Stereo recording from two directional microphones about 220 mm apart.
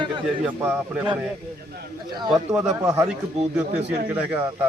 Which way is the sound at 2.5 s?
10° right (ahead or behind).